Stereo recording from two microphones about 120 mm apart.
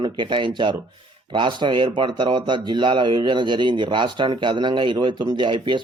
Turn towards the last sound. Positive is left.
turn(degrees=-40)  # may be behind; listen again after turning